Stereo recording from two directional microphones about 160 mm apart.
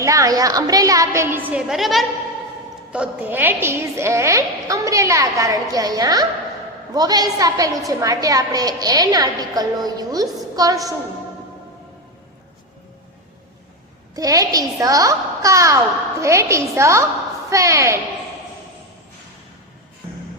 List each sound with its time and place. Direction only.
0.0 s a woman's voice: 20° right (ahead or behind)
14.2 s a woman's voice: 20° right (ahead or behind)